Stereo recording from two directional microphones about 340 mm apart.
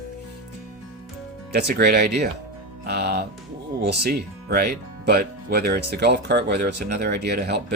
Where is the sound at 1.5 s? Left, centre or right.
Right.